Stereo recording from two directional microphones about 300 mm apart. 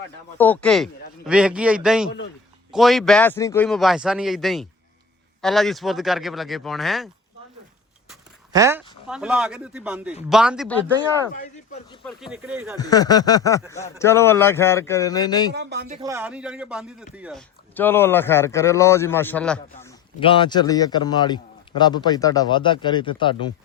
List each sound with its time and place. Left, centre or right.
0.3 s speech: centre
8.5 s speech: centre
12.0 s speech: centre
12.7 s a man's voice: centre
15.5 s speech: right
16.0 s a man's voice: centre
20.1 s a man's voice: centre